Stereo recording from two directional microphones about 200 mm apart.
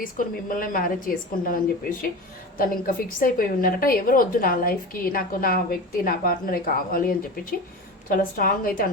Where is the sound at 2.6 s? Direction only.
45° left (ahead or behind).